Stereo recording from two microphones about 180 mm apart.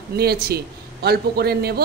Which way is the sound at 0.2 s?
60° right (ahead or behind).